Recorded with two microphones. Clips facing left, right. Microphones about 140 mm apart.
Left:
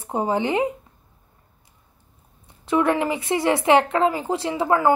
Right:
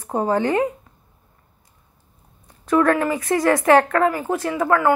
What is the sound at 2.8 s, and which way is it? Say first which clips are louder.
A woman's voice: right 2 dB; 15° left (ahead or behind).